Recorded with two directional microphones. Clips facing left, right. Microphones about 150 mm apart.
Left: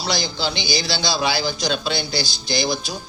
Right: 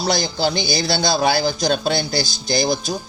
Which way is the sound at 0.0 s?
45° right (ahead or behind).